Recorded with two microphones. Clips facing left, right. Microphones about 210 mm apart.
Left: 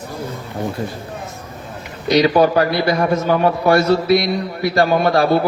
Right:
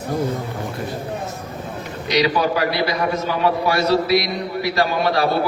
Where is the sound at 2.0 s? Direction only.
50° left (ahead or behind).